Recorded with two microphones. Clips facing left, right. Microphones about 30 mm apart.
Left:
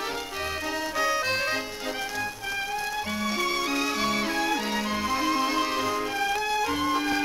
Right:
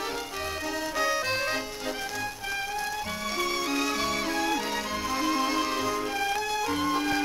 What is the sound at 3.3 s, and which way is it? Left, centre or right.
Music, centre.